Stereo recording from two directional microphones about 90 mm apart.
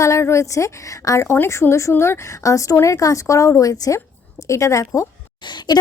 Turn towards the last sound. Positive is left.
turn(degrees=55)  # may be behind; listen again after turning